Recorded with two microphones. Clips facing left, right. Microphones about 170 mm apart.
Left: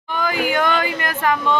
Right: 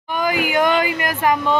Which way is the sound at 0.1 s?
15° right (ahead or behind).